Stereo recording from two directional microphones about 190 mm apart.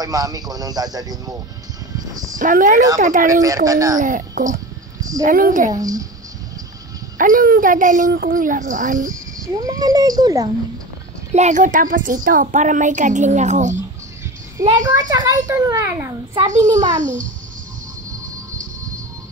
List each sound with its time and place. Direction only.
0.0 s speech: 20° right (ahead or behind)
2.3 s speech: 45° right (ahead or behind)
3.3 s a child's voice: 20° right (ahead or behind)
4.0 s speech: 45° right (ahead or behind)
5.7 s speech: 20° right (ahead or behind)
7.2 s speech: 45° right (ahead or behind)
9.5 s speech: 20° right (ahead or behind)
11.3 s a woman's voice: 40° right (ahead or behind)
14.6 s a child's voice: 20° right (ahead or behind)
16.4 s a woman's voice: 40° right (ahead or behind)